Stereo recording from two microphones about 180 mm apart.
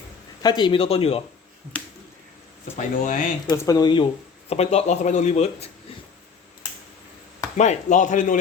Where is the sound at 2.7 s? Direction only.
45° left (ahead or behind).